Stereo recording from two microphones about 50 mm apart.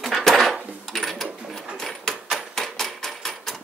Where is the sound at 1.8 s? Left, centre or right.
Centre.